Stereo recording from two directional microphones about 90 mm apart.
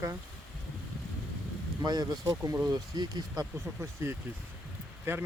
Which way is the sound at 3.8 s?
25° right (ahead or behind).